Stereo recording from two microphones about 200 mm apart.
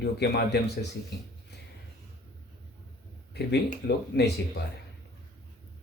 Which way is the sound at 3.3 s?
55° left (ahead or behind).